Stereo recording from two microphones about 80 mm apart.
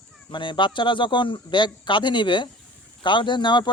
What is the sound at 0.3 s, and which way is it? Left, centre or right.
A man's voice, left.